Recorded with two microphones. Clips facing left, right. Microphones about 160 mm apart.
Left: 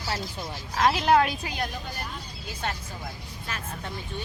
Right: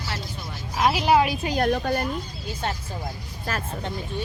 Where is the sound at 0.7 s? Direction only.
10° right (ahead or behind).